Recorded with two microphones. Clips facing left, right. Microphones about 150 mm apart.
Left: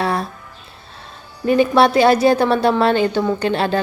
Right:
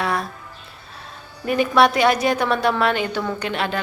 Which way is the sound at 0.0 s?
30° left (ahead or behind).